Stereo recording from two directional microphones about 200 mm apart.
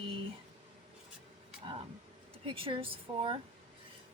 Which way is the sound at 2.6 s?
25° right (ahead or behind).